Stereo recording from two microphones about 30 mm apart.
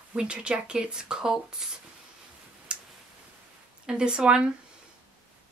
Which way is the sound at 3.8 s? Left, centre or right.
Right.